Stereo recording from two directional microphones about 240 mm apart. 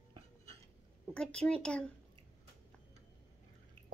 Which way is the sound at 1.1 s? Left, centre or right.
Centre.